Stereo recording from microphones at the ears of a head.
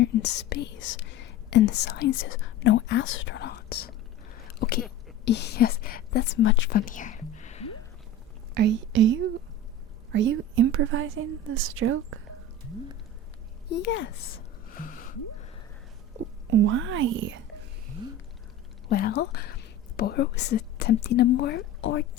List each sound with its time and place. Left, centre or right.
0.0 s speech: left
8.5 s a woman's voice: right
13.7 s speech: left
16.1 s speech: right
18.9 s speech: left